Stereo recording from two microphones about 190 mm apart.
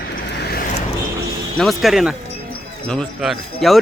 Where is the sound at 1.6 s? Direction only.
Centre (ahead or behind).